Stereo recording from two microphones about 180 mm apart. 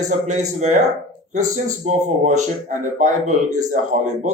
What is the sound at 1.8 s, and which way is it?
Speech, 40° right (ahead or behind).